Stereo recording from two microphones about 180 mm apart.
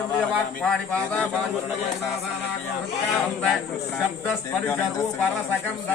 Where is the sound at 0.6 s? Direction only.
5° left (ahead or behind).